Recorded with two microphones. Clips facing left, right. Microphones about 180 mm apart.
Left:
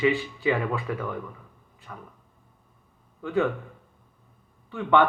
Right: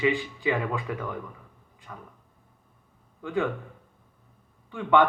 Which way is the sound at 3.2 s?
15° right (ahead or behind).